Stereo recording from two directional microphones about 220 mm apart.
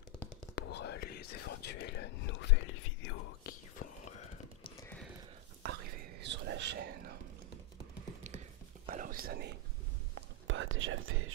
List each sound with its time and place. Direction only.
0.6 s whispering: 50° left (ahead or behind); by 3.2 s 65° left (ahead or behind)
3.4 s whispering: 35° left (ahead or behind)
6.2 s whispering: 55° right (ahead or behind)
8.8 s whispering: 35° right (ahead or behind)
10.4 s whispering: 60° right (ahead or behind)